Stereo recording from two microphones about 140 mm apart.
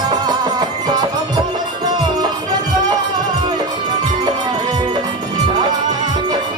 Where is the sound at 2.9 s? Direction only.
30° right (ahead or behind).